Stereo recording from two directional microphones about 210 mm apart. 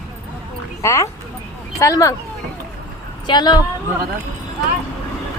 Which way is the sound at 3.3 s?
20° left (ahead or behind).